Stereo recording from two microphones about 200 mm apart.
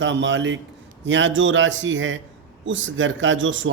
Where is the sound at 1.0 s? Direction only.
70° right (ahead or behind).